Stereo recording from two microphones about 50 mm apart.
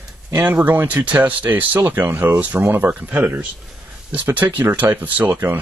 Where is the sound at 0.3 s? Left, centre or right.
Right.